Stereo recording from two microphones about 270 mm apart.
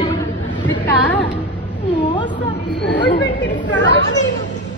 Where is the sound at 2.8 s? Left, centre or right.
Left.